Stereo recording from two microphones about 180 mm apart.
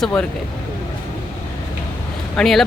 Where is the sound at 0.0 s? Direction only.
5° left (ahead or behind).